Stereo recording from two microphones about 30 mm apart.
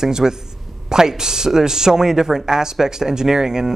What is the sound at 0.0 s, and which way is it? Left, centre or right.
A man's voice, centre.